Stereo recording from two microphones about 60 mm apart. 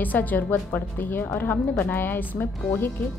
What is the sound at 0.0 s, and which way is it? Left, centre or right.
A woman's voice, left.